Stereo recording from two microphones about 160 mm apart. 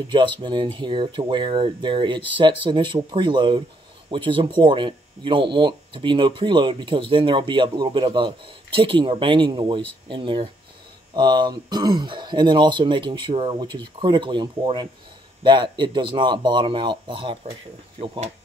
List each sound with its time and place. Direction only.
0.1 s speech: 30° right (ahead or behind)